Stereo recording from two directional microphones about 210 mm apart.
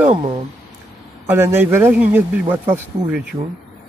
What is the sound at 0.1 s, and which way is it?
Speech, 20° right (ahead or behind).